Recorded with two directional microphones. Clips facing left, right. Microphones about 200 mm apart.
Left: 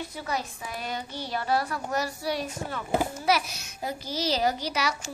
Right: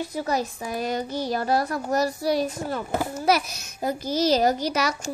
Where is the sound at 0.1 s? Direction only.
40° right (ahead or behind).